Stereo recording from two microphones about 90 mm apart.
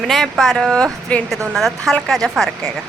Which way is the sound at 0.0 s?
Centre (ahead or behind).